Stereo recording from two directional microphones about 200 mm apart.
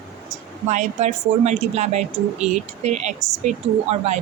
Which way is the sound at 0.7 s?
35° right (ahead or behind).